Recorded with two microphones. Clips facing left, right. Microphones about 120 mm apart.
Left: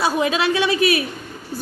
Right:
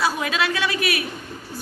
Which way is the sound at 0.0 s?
25° left (ahead or behind).